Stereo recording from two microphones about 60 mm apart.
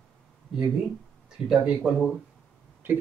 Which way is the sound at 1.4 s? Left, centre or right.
Centre.